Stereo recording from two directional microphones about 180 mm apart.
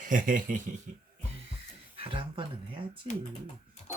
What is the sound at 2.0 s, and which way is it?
Speech, 30° right (ahead or behind).